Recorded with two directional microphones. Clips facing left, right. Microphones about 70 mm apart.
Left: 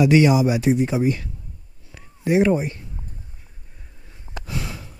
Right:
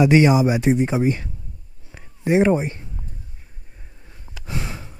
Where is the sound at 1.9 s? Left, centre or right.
Right.